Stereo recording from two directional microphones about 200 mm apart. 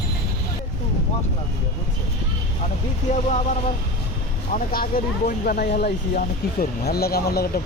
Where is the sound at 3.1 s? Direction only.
40° left (ahead or behind).